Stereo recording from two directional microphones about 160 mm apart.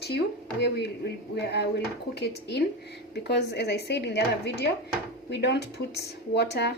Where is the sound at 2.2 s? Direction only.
90° left.